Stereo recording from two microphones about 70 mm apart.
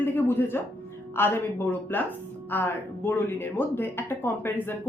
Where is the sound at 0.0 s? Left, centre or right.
Left.